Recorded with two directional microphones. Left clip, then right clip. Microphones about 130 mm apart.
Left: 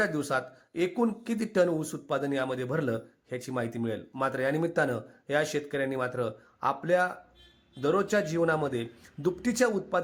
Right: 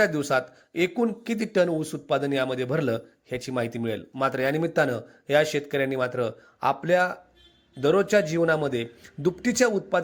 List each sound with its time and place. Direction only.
0.0 s speech: 15° right (ahead or behind)